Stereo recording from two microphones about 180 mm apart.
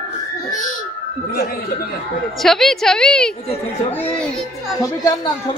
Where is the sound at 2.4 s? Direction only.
Centre (ahead or behind).